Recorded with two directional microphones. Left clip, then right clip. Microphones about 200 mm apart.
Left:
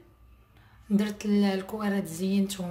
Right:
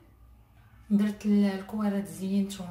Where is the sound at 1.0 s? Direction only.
50° left (ahead or behind).